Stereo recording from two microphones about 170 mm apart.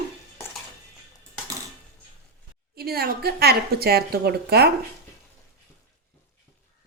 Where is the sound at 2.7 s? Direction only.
65° right (ahead or behind).